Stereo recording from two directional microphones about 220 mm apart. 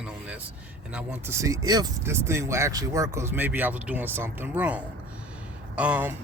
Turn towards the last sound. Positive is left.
turn(degrees=-5)  # may be behind; listen again after turning